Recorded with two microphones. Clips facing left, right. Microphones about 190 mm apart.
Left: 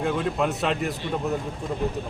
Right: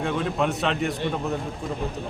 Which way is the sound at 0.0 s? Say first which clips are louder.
Even; 5° left (ahead or behind).